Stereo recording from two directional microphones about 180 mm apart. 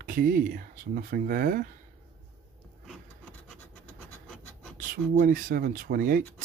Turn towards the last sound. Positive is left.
turn(degrees=-55)  # may be behind; listen again after turning